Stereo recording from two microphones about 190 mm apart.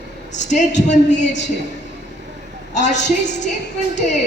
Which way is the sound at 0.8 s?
40° left (ahead or behind).